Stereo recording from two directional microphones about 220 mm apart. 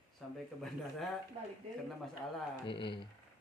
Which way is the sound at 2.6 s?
20° left (ahead or behind).